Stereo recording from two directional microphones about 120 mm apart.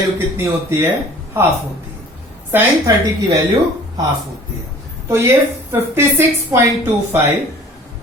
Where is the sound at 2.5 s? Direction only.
15° right (ahead or behind).